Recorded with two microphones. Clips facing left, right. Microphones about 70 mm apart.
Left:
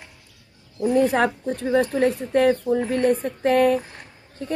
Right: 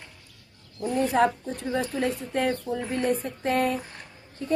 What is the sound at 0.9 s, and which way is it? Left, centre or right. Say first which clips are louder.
Speech: left 3 dB; left.